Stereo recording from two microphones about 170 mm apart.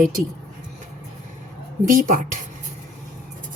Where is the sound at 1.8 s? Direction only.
55° right (ahead or behind).